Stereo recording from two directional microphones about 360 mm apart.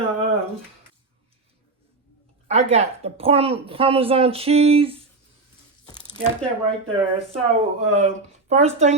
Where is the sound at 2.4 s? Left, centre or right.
Centre.